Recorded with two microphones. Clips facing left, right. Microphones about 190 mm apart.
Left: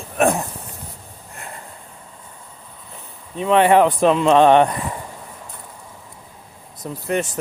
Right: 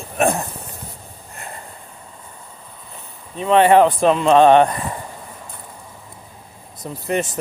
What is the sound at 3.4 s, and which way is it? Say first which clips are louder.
Speech: right 1 dB; 10° left (ahead or behind).